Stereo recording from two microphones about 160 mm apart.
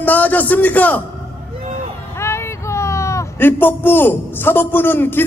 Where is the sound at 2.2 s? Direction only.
15° left (ahead or behind).